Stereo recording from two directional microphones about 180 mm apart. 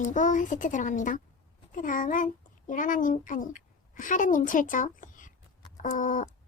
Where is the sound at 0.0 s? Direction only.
45° left (ahead or behind).